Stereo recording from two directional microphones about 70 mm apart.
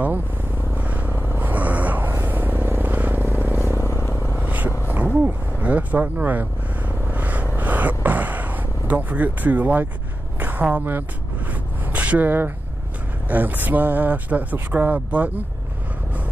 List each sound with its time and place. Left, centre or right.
0.7 s vehicle: right
3.6 s vehicle: left
4.4 s vehicle: right
4.6 s a sound: left
5.2 s speech: right
7.1 s vehicle: right
7.5 s a sound: right
13.3 s speech: right